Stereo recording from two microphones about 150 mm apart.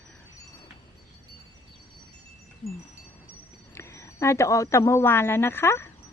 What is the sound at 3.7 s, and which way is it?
A woman's voice, 20° left (ahead or behind).